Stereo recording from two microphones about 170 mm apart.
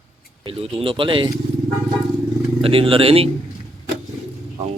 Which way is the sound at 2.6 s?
35° right (ahead or behind).